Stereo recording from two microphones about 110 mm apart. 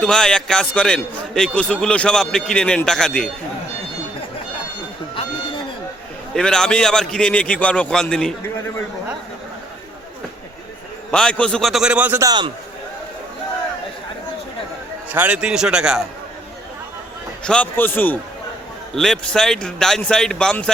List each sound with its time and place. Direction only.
0.0 s a man's voice: 5° left (ahead or behind)
6.3 s a man's voice: 5° left (ahead or behind)
11.1 s speech: 10° left (ahead or behind); by 12.2 s 15° right (ahead or behind)
12.2 s a man's voice: 40° right (ahead or behind)
15.1 s a man's voice: 15° right (ahead or behind)
17.4 s a man's voice: 10° left (ahead or behind)
18.9 s speech: 5° left (ahead or behind)